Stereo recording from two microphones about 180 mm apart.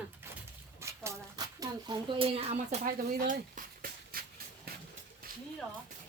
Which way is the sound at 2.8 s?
50° right (ahead or behind).